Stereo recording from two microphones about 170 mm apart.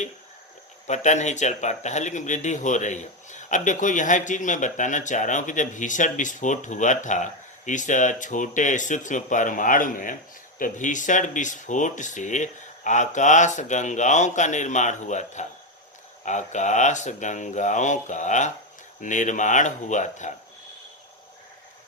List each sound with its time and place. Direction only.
0.9 s speech: 45° left (ahead or behind)